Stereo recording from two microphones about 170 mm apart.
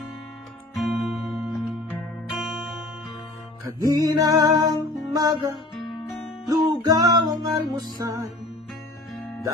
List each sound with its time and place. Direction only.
0.8 s music: centre (ahead or behind)
3.9 s music: 20° right (ahead or behind)